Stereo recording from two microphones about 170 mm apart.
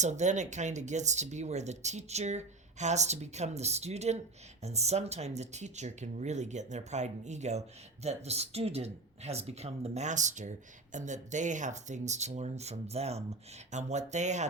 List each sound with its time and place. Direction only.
0.0 s speech: 45° right (ahead or behind)